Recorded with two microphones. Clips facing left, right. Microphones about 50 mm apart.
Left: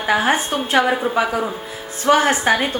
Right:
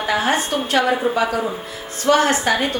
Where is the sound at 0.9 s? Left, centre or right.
Centre.